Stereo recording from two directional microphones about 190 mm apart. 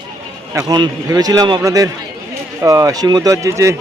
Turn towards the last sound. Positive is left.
turn(degrees=-15)  # may be behind; listen again after turning